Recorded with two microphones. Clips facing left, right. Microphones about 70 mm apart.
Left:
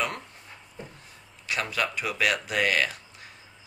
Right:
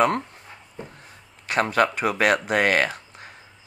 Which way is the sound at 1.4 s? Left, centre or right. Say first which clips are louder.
Right 8 dB; right.